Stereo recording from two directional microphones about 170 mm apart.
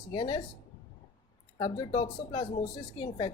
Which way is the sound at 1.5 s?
30° left (ahead or behind).